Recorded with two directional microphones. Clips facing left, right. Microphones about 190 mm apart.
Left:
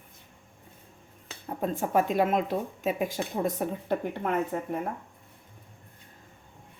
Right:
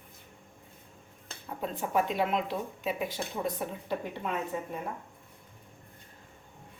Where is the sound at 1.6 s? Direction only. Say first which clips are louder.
Left 4 dB; 50° left (ahead or behind).